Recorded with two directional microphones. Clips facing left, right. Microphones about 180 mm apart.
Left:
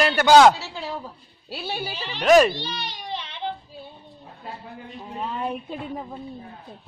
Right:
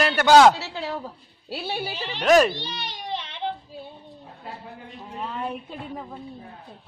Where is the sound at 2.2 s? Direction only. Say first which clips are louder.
Left 2 dB; 5° left (ahead or behind).